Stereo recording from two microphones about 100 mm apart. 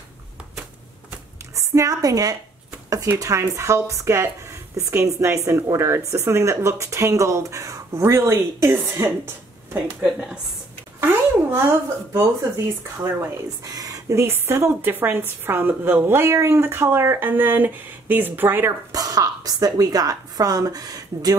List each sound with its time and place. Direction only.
1.5 s a woman's voice: 35° right (ahead or behind)
10.0 s a woman's voice: 5° right (ahead or behind)
11.5 s speech: 25° right (ahead or behind)
13.7 s speech: 40° right (ahead or behind); by 18.7 s 20° right (ahead or behind)
18.9 s speech: 35° right (ahead or behind)